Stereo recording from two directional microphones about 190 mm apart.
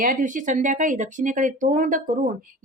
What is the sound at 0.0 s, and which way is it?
A woman's voice, 45° right (ahead or behind).